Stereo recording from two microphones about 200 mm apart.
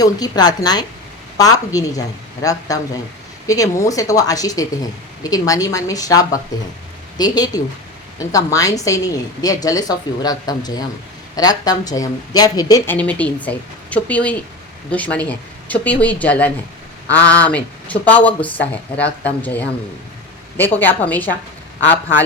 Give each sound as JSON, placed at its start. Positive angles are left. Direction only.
{"t": 0.0, "sound": "a man's voice", "side_deg": 20}